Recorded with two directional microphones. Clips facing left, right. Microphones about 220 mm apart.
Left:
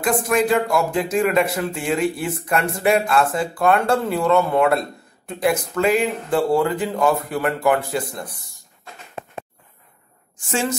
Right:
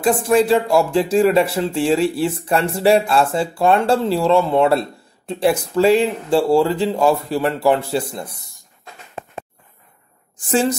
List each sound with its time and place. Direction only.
0.0 s speech: 30° right (ahead or behind)
10.4 s a woman's voice: 35° right (ahead or behind)